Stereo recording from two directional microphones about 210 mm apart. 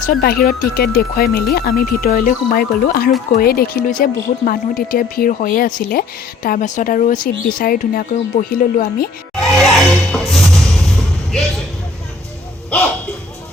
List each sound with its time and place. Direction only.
0.0 s speech: 45° left (ahead or behind)
9.4 s music: centre (ahead or behind)
12.7 s speech: 5° left (ahead or behind)